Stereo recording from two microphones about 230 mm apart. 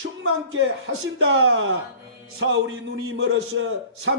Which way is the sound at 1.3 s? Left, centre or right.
Right.